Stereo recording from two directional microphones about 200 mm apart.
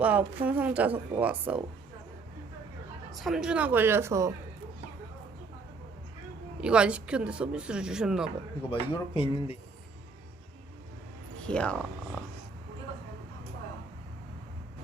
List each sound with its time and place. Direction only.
0.0 s a woman's voice: 10° right (ahead or behind)
3.1 s a woman's voice: centre (ahead or behind)
6.6 s speech: 5° right (ahead or behind)
8.7 s speech: 25° left (ahead or behind)
11.4 s speech: 5° left (ahead or behind)